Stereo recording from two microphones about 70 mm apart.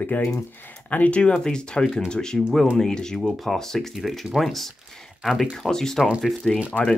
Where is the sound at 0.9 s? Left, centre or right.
Centre.